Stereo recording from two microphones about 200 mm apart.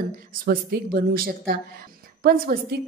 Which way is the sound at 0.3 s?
45° right (ahead or behind).